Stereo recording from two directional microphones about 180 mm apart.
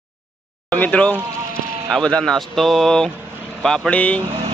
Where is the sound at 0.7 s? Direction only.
5° left (ahead or behind).